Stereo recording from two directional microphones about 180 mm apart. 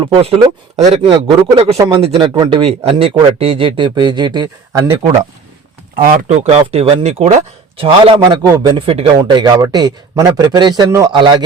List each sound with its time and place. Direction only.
0.0 s speech: 30° right (ahead or behind)
1.1 s a man's voice: 20° right (ahead or behind)
6.0 s a man's voice: 45° right (ahead or behind); by 11.4 s 25° right (ahead or behind)